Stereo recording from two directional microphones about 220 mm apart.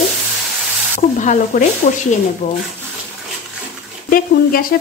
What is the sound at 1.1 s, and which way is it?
Speech, 35° left (ahead or behind).